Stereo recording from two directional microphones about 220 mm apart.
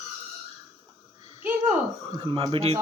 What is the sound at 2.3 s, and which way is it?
Speech, 25° right (ahead or behind).